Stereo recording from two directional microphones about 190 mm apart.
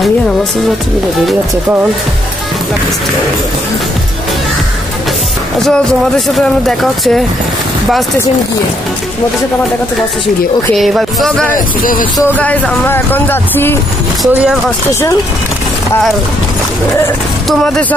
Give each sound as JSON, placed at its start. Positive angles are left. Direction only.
{"t": 1.2, "sound": "speech", "side_deg": -10}
{"t": 5.6, "sound": "speech", "side_deg": 5}
{"t": 10.7, "sound": "speech", "side_deg": 0}
{"t": 11.5, "sound": "speech", "side_deg": 45}
{"t": 12.4, "sound": "speech", "side_deg": 10}
{"t": 14.2, "sound": "speech", "side_deg": 0}
{"t": 14.9, "sound": "speech", "side_deg": 15}
{"t": 17.5, "sound": "speech", "side_deg": 0}